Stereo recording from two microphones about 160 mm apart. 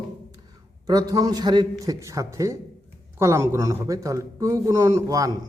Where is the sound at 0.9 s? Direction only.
20° right (ahead or behind).